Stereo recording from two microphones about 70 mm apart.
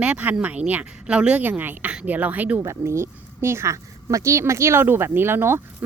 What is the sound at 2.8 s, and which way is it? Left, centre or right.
Speech, right.